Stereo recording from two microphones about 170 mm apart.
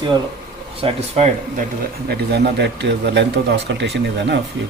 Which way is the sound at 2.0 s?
75° right (ahead or behind).